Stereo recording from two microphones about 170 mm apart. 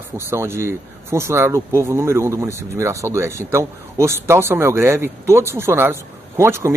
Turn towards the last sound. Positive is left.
turn(degrees=-15)  # may be behind; listen again after turning